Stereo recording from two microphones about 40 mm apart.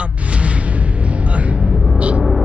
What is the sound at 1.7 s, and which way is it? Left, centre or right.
Music, centre.